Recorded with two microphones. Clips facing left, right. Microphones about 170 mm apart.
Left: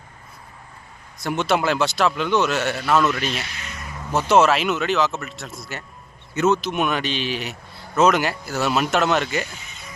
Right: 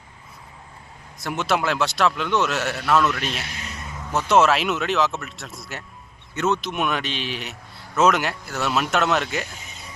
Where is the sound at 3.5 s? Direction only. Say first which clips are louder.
Even; 35° right (ahead or behind).